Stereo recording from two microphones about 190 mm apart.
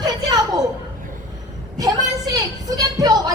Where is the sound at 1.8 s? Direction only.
20° right (ahead or behind).